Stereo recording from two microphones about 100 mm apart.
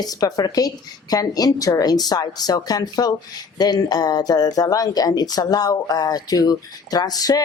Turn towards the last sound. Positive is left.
turn(degrees=40)  # may be behind; listen again after turning